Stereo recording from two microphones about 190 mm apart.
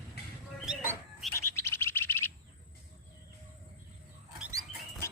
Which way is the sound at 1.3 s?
15° left (ahead or behind).